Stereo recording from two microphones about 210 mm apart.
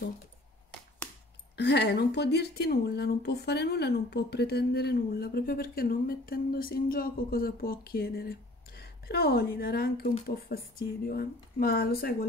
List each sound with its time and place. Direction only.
1.6 s speech: 55° left (ahead or behind)